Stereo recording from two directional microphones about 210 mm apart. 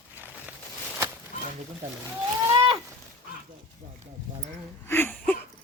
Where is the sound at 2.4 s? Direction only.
15° right (ahead or behind).